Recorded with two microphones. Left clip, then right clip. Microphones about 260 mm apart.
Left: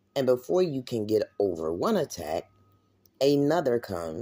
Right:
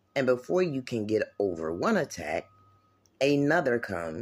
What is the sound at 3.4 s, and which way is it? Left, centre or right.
Speech, centre.